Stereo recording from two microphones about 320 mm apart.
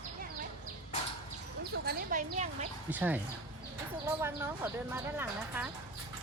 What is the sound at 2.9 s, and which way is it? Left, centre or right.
Speech, centre.